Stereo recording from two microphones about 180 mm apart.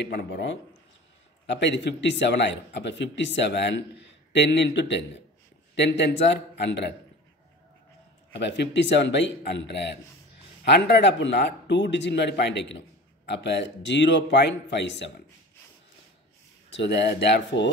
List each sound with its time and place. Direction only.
0.3 s a man's voice: 80° left
8.4 s speech: 75° left (ahead or behind)
16.7 s speech: 75° left (ahead or behind)